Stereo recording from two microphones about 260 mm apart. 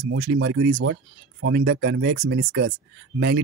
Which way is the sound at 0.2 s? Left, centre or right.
Right.